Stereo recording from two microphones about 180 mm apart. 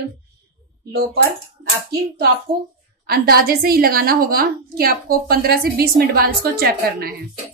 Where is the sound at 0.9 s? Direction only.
65° right (ahead or behind).